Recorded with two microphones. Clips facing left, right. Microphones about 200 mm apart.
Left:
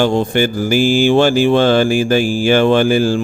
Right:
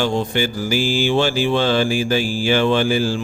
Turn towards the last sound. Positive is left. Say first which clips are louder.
# left 5 dB
turn(degrees=50)  # may be behind; listen again after turning